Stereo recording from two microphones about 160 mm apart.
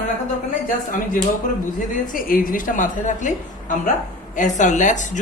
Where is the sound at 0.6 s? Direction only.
60° left (ahead or behind).